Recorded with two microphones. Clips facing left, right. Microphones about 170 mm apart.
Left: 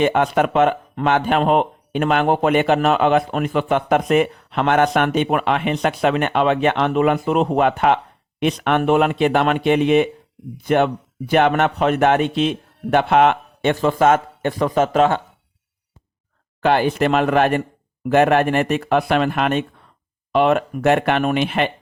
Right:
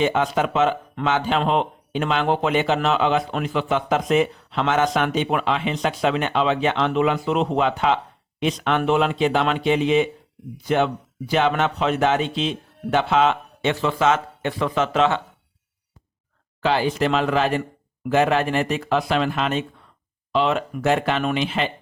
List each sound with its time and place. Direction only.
0.0 s speech: 55° left (ahead or behind)
16.6 s speech: 55° left (ahead or behind)